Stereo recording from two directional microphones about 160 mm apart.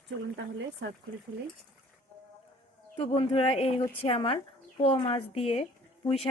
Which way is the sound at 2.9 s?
35° left (ahead or behind).